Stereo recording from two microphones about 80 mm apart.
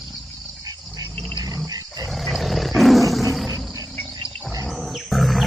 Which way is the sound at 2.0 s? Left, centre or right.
Centre.